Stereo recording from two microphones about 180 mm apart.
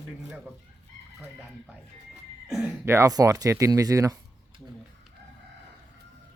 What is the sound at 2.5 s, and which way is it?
Speech, 5° right (ahead or behind).